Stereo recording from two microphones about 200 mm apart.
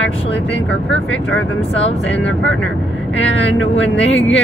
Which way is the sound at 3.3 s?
65° left (ahead or behind).